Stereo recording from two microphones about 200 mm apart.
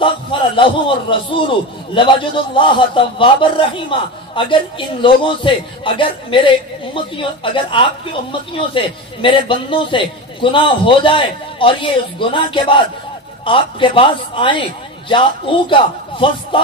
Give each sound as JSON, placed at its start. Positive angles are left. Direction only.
{"t": 0.0, "sound": "speech", "side_deg": 25}